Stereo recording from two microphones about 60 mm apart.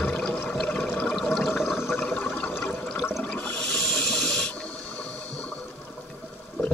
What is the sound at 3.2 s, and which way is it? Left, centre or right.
Water, centre.